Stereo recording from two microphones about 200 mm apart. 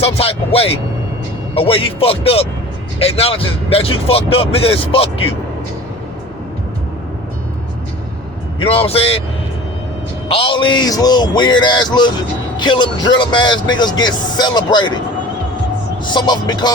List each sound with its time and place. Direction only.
0.0 s speech: 30° left (ahead or behind)
8.6 s speech: 30° left (ahead or behind)
10.2 s speech: 30° left (ahead or behind)
16.0 s speech: 20° left (ahead or behind)